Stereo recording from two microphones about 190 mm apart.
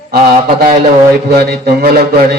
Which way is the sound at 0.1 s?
50° right (ahead or behind).